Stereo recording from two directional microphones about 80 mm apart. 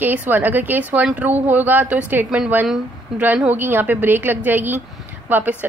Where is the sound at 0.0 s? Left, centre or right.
Right.